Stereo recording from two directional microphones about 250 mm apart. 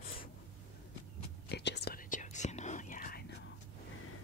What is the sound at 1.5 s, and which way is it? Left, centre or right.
Whispering, left.